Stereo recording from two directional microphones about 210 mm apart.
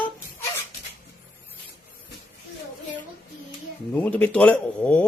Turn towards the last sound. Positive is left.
turn(degrees=5)  # may be behind; listen again after turning